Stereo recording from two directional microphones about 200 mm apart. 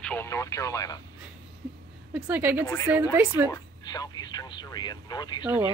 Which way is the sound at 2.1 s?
10° right (ahead or behind).